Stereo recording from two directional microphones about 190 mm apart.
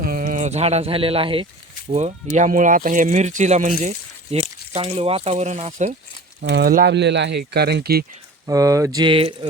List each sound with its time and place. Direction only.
0.0 s speech: 45° right (ahead or behind)
6.4 s speech: 55° right (ahead or behind)
8.4 s speech: 15° right (ahead or behind)